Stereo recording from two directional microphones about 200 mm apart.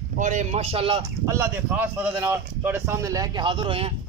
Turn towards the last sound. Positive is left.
turn(degrees=-25)  # may be behind; listen again after turning